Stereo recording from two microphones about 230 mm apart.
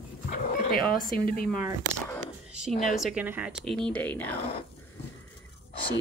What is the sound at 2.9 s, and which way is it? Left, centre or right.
Speech, centre.